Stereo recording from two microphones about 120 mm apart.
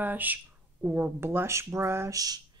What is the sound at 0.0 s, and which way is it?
Speech, 15° right (ahead or behind).